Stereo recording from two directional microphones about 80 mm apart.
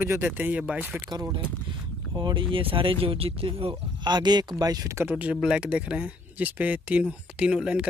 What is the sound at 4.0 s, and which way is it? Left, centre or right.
Speech, right.